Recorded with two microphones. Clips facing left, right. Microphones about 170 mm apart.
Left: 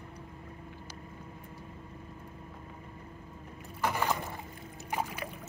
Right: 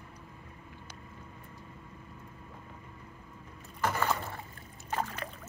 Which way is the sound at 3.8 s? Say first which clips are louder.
Even; 15° left (ahead or behind).